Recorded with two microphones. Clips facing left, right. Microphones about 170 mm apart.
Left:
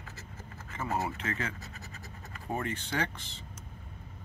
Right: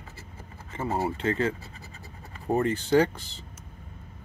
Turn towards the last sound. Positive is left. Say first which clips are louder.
# right 12 dB
turn(degrees=-40)  # may be behind; listen again after turning